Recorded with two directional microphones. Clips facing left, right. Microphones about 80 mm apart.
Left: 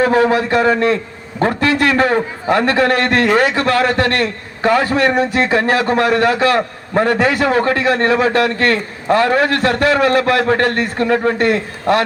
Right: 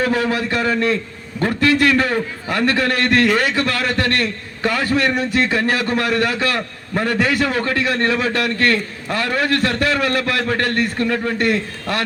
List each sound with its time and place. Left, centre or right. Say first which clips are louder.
0.0 s a man's voice: left 6 dB; left